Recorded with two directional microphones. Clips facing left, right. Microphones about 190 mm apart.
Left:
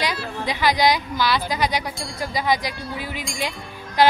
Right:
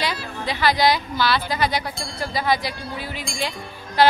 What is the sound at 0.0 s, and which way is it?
A woman's voice, 15° left (ahead or behind).